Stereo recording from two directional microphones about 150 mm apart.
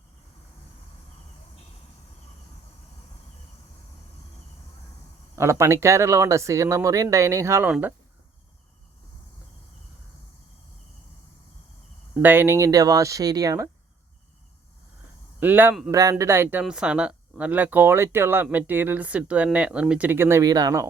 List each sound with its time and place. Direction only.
5.4 s speech: 20° right (ahead or behind)
12.2 s speech: 15° right (ahead or behind)
15.4 s speech: 15° right (ahead or behind)